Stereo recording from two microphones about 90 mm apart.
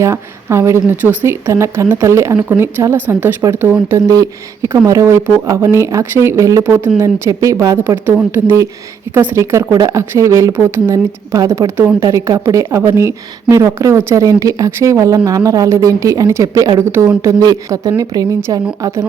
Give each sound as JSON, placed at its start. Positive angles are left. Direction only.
{"t": 0.0, "sound": "a woman's voice", "side_deg": -30}
{"t": 4.1, "sound": "speech", "side_deg": -40}
{"t": 7.8, "sound": "a woman's voice", "side_deg": -25}